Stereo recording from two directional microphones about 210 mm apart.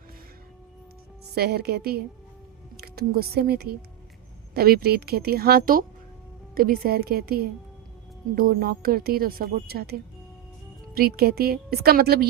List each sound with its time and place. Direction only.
1.4 s a woman's voice: 50° right (ahead or behind)